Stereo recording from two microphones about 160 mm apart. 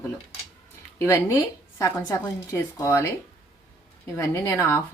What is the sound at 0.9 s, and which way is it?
Speech, 15° left (ahead or behind).